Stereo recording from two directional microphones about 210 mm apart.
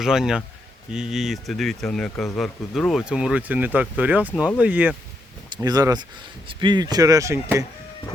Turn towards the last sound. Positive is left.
turn(degrees=-15)  # may be behind; listen again after turning